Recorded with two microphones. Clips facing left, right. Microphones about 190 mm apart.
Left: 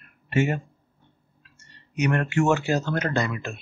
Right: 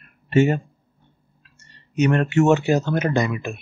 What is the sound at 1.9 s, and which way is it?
Speech, 25° right (ahead or behind).